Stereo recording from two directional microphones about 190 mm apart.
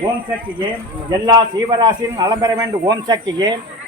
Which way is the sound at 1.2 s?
20° right (ahead or behind).